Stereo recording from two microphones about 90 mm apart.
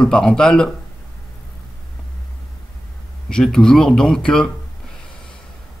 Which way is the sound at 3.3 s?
5° left (ahead or behind).